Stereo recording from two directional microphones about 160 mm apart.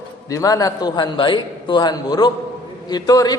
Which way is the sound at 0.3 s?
20° left (ahead or behind).